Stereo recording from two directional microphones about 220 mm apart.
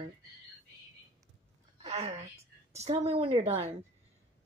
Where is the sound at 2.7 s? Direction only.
30° right (ahead or behind).